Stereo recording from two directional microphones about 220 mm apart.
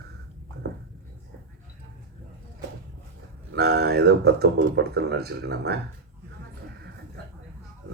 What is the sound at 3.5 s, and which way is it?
Speech, 50° right (ahead or behind).